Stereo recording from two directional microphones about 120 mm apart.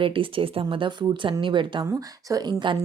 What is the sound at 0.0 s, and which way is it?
Speech, 50° right (ahead or behind).